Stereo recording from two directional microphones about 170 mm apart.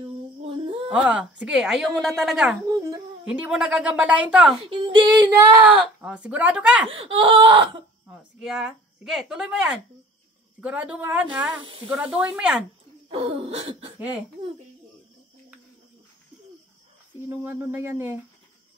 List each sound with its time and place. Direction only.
0.0 s a sound: 40° right (ahead or behind)
0.8 s a woman's voice: 5° right (ahead or behind)
4.6 s throat clearing: 30° right (ahead or behind)
5.3 s speech: 10° right (ahead or behind)
6.9 s speech: 30° right (ahead or behind)
8.1 s a woman's voice: 5° right (ahead or behind)
13.1 s throat clearing: 35° right (ahead or behind)
17.3 s speech: 15° right (ahead or behind)